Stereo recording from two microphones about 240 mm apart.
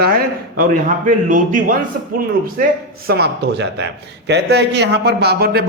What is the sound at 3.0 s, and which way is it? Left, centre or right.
A man's voice, right.